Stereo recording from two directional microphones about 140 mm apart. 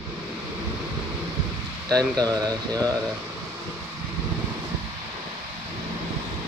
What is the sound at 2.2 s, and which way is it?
Speech, 25° right (ahead or behind).